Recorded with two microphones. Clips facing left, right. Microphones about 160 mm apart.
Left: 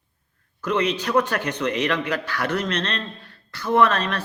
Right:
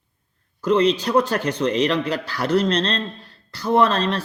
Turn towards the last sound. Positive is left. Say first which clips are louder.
# right 1 dB
turn(degrees=-30)  # may be behind; listen again after turning